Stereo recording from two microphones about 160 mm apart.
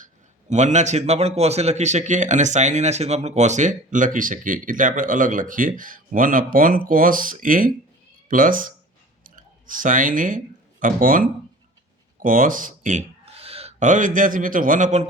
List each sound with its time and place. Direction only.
0.5 s a man's voice: 45° right (ahead or behind)